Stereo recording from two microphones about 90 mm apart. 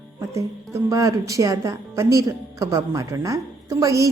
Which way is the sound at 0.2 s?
35° right (ahead or behind).